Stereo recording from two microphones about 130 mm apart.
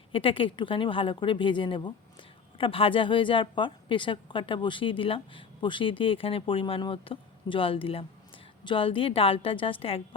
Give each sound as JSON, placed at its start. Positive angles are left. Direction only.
{"t": 0.1, "sound": "a woman's voice", "side_deg": 45}